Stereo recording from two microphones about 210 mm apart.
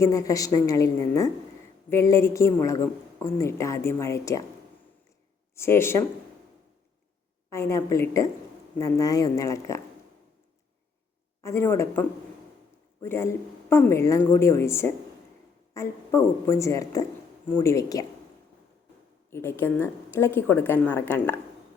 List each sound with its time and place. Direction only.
0.0 s a woman's voice: 15° left (ahead or behind)
5.5 s a woman's voice: 10° left (ahead or behind)
7.5 s a woman's voice: 15° left (ahead or behind)
11.4 s a woman's voice: 15° left (ahead or behind)
19.3 s a woman's voice: 10° left (ahead or behind)